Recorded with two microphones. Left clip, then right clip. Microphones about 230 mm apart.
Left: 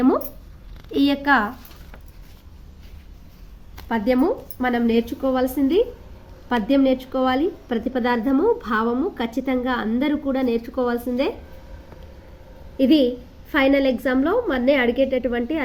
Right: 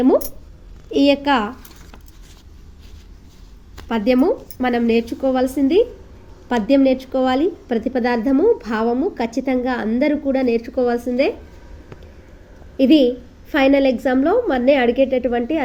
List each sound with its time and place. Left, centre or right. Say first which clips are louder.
1.2 s speech: even; centre
3.8 s a woman's voice: right 3 dB; centre
12.7 s a woman's voice: right 4 dB; centre